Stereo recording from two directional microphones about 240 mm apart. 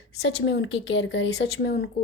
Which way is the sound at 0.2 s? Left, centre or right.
Left.